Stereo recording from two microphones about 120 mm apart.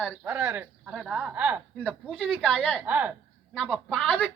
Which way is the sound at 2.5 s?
10° left (ahead or behind).